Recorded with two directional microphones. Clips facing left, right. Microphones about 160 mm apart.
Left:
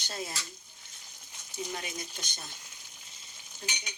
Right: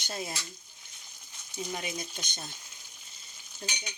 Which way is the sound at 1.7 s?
20° right (ahead or behind).